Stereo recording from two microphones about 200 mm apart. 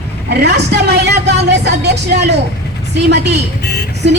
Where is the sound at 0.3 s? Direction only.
55° right (ahead or behind).